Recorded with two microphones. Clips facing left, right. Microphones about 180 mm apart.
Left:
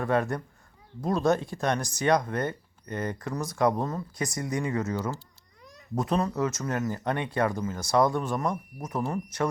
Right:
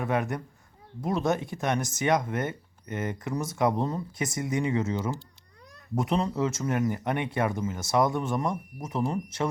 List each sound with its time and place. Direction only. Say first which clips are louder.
0.0 s speech: left 2 dB; 20° right (ahead or behind)